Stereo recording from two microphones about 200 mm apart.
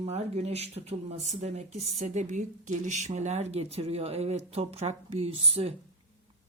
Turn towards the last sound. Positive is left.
turn(degrees=-30)  # may be behind; listen again after turning